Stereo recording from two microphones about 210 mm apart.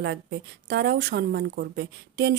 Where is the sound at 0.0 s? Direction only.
55° right (ahead or behind).